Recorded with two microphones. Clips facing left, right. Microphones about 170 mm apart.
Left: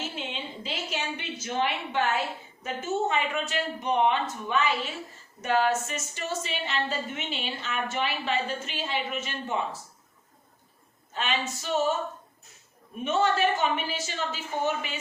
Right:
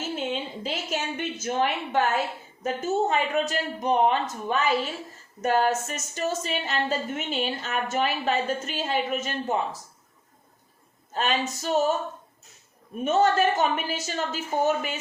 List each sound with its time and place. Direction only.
0.2 s a sound: 45° right (ahead or behind)
2.6 s a woman's voice: 40° right (ahead or behind)
11.1 s speech: 40° right (ahead or behind)
13.1 s a woman's voice: 40° right (ahead or behind)